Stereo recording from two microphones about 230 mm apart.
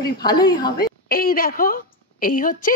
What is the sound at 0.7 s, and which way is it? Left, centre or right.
A woman's voice, left.